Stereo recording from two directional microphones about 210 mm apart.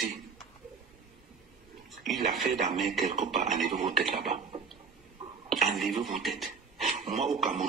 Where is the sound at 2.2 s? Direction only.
40° right (ahead or behind).